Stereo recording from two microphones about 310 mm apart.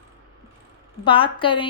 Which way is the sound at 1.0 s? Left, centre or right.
Centre.